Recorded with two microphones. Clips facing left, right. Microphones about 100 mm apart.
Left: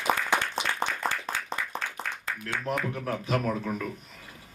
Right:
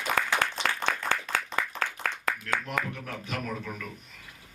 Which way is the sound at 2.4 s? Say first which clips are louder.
Left 4 dB; 40° left (ahead or behind).